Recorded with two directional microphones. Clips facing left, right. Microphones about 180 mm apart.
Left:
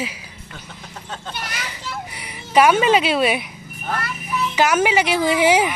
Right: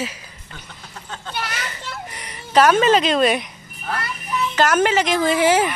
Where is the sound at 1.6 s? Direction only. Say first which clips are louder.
Left 1 dB; 10° left (ahead or behind).